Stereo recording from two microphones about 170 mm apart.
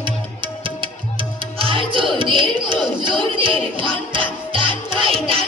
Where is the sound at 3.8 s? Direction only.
30° right (ahead or behind).